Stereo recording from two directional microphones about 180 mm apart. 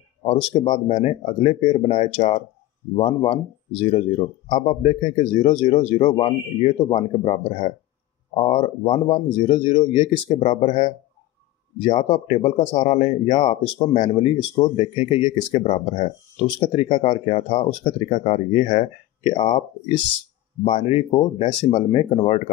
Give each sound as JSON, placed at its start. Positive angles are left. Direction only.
{"t": 0.2, "sound": "speech", "side_deg": 30}
{"t": 20.6, "sound": "speech", "side_deg": 35}